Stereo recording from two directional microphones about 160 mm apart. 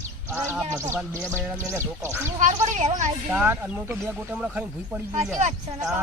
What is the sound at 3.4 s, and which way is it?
Speech, 10° right (ahead or behind).